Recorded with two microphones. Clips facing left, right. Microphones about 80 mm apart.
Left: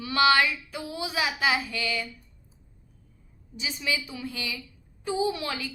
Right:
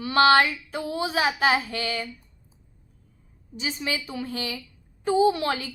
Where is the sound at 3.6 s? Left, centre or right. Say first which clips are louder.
Right 1 dB; right.